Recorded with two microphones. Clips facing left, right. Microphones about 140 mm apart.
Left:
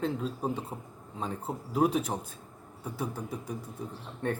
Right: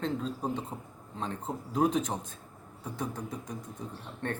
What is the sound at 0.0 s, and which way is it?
A man's voice, 5° left (ahead or behind).